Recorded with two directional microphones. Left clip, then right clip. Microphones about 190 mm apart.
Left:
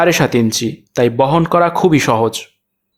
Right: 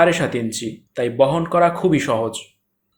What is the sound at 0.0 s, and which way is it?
Speech, 30° left (ahead or behind).